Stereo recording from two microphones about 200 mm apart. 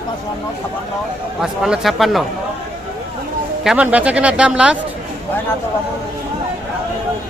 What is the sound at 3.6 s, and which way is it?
Speech, 5° right (ahead or behind).